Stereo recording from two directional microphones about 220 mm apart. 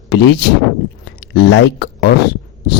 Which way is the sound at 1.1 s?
55° left (ahead or behind).